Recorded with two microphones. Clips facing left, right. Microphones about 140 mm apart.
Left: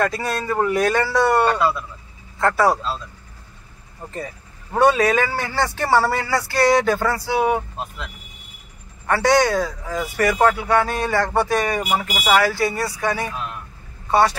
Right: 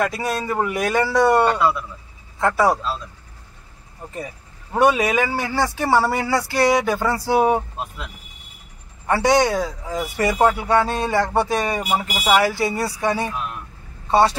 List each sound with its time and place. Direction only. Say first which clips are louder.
0.0 s a man's voice: even; 10° right (ahead or behind)
4.7 s a man's voice: left 1 dB; 15° right (ahead or behind)
7.2 s speech: right 3 dB; 40° right (ahead or behind)
9.0 s speech: even; 20° right (ahead or behind)